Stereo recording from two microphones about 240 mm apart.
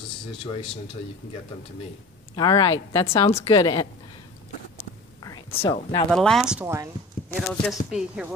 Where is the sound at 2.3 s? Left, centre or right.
Centre.